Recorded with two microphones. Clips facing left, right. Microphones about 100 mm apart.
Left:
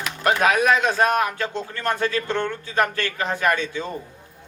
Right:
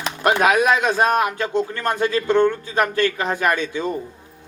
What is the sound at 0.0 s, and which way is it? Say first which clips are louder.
Speech: right 2 dB; 25° right (ahead or behind).